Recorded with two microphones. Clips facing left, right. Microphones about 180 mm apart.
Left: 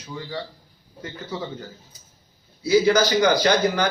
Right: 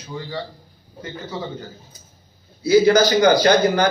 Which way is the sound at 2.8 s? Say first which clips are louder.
Right 4 dB; 35° right (ahead or behind).